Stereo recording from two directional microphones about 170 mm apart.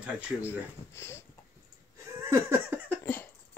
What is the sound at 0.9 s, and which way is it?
Speech, 15° left (ahead or behind).